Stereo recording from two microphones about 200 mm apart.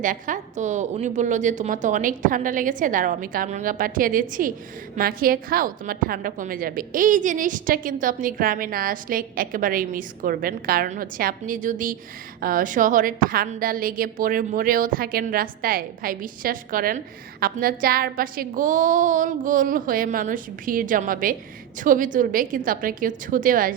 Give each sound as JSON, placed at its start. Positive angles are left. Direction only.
{"t": 0.0, "sound": "a woman's voice", "side_deg": -40}